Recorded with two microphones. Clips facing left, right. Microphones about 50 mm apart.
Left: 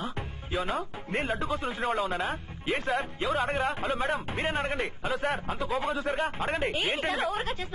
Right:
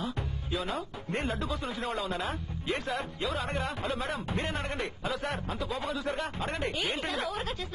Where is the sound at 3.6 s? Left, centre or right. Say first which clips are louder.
Left 5 dB; centre.